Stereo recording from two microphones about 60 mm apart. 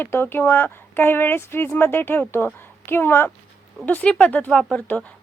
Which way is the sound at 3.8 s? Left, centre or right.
Left.